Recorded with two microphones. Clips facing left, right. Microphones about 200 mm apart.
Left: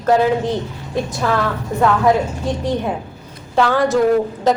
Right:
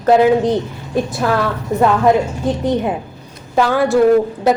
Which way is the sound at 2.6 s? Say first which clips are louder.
Right 3 dB; 20° right (ahead or behind).